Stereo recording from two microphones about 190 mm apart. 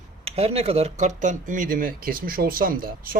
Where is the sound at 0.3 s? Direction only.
30° right (ahead or behind).